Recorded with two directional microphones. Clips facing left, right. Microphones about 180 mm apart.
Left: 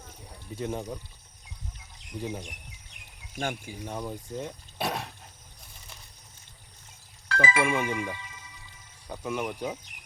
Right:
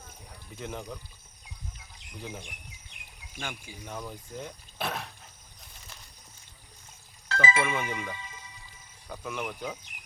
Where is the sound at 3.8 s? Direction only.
20° left (ahead or behind).